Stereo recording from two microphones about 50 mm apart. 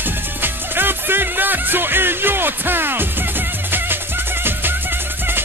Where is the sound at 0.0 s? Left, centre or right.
Right.